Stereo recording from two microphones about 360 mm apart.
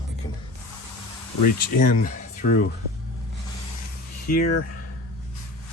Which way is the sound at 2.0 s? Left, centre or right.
Left.